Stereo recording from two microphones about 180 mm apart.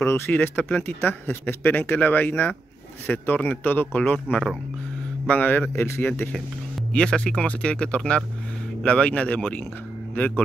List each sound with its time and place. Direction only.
0.0 s a man's voice: 10° left (ahead or behind)